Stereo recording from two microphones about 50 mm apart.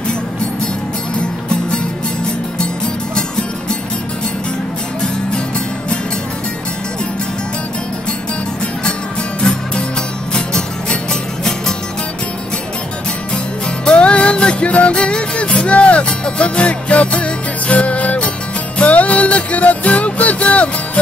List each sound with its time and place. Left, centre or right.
9.4 s music: centre
13.8 s music: left